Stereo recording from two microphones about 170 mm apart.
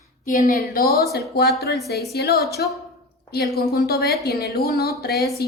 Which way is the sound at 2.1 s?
70° left (ahead or behind).